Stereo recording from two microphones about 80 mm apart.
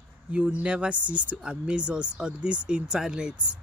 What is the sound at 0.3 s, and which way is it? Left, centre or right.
Speech, centre.